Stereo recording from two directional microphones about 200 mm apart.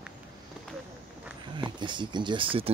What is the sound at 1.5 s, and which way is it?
Speech, 25° right (ahead or behind).